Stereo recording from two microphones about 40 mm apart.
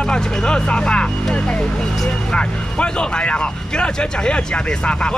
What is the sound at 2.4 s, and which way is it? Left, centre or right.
Speech, left.